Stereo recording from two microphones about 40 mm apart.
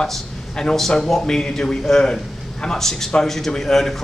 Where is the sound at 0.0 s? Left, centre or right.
Centre.